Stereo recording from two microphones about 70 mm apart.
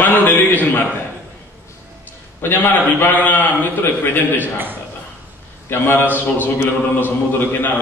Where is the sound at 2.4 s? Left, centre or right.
Left.